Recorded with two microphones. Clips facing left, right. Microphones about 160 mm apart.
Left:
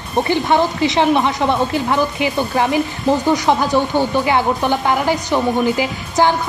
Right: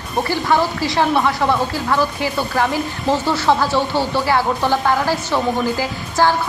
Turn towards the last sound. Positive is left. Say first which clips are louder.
# left 1 dB
turn(degrees=20)  # may be behind; listen again after turning